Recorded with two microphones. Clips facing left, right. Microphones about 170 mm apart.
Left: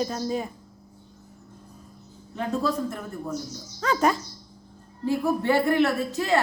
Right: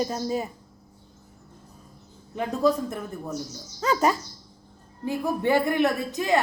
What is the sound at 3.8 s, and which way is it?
Speech, 5° right (ahead or behind).